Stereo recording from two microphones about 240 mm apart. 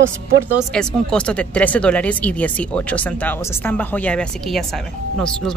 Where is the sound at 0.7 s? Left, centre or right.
Centre.